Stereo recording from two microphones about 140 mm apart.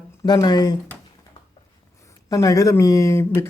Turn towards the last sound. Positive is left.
turn(degrees=20)  # may be behind; listen again after turning